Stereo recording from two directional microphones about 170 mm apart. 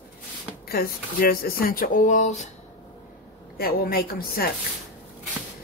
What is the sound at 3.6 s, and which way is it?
Speech, 60° left (ahead or behind).